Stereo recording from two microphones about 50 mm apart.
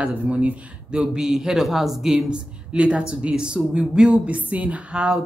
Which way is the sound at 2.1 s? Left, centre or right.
Right.